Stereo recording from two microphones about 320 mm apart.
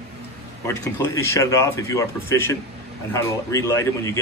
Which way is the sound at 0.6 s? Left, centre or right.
Centre.